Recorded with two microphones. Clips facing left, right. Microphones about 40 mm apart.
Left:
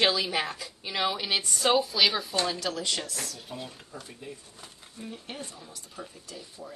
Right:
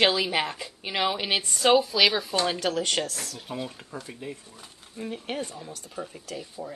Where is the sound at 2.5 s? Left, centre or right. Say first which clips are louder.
Right 4 dB; right.